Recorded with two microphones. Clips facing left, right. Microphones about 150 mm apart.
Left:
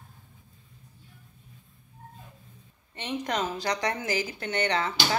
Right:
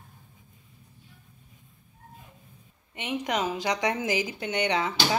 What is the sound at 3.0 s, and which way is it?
A woman's voice, 10° right (ahead or behind).